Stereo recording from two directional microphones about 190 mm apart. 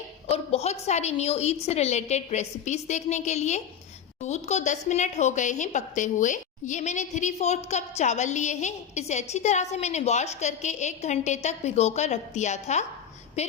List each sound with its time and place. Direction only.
0.3 s a woman's voice: 35° left (ahead or behind)